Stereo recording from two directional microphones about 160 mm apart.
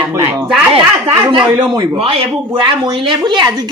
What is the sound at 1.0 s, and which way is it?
Speech, 30° right (ahead or behind).